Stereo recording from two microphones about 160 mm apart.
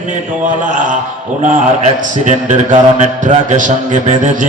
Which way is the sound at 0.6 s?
55° right (ahead or behind).